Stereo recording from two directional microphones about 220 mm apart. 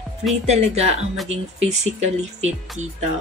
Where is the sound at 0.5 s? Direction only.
30° right (ahead or behind).